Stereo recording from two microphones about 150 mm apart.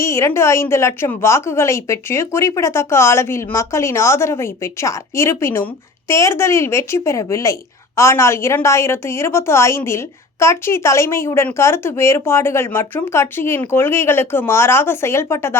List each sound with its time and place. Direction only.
0.0 s a woman's voice: 20° left (ahead or behind)